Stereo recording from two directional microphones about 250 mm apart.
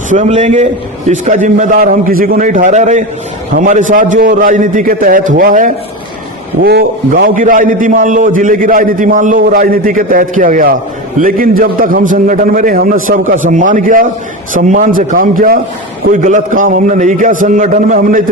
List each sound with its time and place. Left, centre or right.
0.1 s a man's voice: right